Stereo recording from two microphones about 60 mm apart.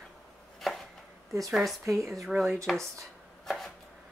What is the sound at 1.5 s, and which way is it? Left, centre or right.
Speech, centre.